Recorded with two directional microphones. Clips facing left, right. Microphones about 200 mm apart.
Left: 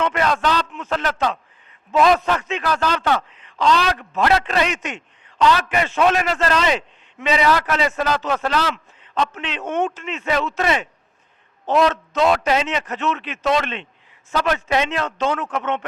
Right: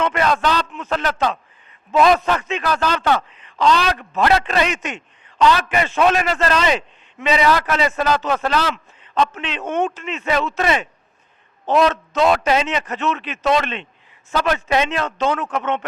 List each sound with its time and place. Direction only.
0.0 s a man's voice: 10° right (ahead or behind)